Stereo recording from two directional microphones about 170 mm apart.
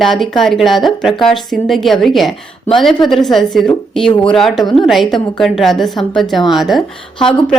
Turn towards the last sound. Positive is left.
turn(degrees=0)  # may be behind; listen again after turning